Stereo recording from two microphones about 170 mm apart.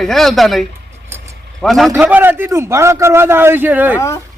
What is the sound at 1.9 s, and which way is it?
A man's voice, 10° right (ahead or behind).